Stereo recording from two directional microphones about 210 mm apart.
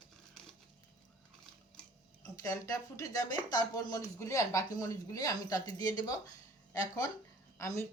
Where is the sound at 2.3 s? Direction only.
15° left (ahead or behind).